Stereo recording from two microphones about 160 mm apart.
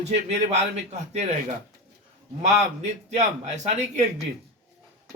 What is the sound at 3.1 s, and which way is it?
Speech, 45° right (ahead or behind).